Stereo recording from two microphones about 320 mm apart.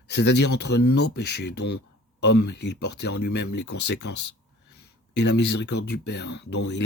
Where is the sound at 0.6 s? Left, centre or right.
Left.